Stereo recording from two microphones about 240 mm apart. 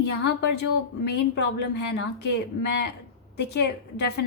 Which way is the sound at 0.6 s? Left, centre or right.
Left.